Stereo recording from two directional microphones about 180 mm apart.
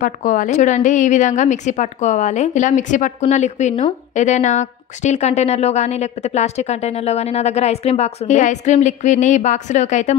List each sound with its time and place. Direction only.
0.0 s a woman's voice: 50° left (ahead or behind)